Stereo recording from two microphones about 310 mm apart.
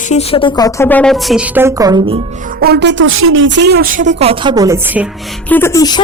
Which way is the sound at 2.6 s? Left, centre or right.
Right.